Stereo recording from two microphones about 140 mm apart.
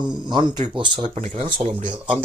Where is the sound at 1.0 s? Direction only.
55° right (ahead or behind).